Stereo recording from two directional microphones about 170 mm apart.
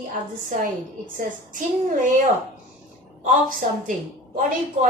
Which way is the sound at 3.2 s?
55° right (ahead or behind).